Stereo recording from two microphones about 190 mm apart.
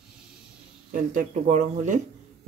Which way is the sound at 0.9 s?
40° right (ahead or behind).